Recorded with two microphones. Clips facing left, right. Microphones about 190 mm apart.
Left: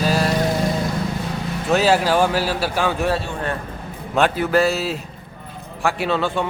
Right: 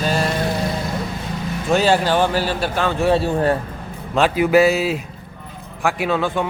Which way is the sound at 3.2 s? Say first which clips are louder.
Right 8 dB; 40° right (ahead or behind).